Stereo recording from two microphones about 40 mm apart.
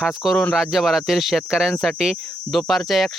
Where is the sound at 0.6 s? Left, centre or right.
Centre.